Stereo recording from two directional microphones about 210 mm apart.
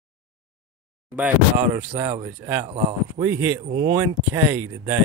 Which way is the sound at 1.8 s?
10° right (ahead or behind).